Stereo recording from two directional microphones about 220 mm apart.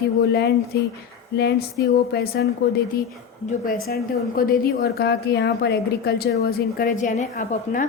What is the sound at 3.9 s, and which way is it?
A woman's voice, 45° left (ahead or behind).